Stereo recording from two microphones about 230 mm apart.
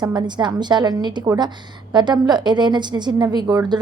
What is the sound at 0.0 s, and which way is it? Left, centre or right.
A woman's voice, centre.